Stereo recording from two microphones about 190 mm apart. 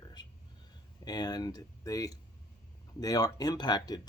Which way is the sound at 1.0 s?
20° left (ahead or behind).